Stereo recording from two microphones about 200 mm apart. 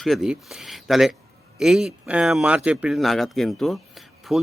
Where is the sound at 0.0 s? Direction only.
Centre (ahead or behind).